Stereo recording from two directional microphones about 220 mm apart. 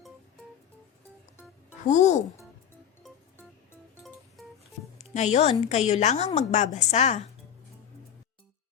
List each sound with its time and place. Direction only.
1.9 s a woman's voice: 35° left (ahead or behind)
3.0 s music: 5° left (ahead or behind)
4.9 s a woman's voice: 30° left (ahead or behind)